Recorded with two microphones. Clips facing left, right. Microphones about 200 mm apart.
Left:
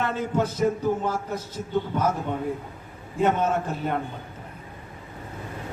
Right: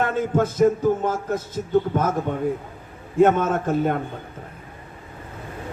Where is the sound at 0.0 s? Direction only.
50° right (ahead or behind).